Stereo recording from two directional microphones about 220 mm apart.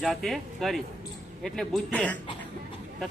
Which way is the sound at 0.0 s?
Centre (ahead or behind).